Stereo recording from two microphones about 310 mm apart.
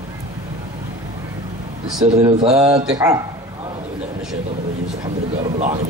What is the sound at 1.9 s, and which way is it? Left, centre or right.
Speech, centre.